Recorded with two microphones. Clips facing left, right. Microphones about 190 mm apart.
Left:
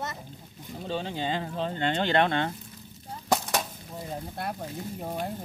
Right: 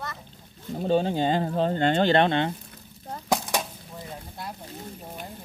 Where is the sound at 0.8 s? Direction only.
45° right (ahead or behind); by 2.5 s 20° right (ahead or behind).